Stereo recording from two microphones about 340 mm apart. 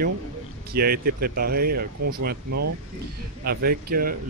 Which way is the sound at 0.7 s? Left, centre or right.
Right.